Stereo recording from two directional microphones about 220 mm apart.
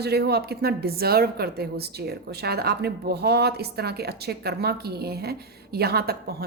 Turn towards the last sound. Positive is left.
turn(degrees=-45)  # may be behind; listen again after turning